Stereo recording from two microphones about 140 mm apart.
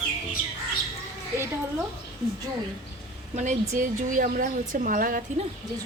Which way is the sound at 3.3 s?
60° right (ahead or behind).